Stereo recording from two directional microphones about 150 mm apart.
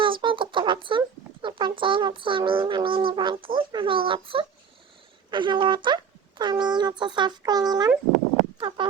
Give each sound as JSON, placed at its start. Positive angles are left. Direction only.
{"t": 0.0, "sound": "speech", "side_deg": -35}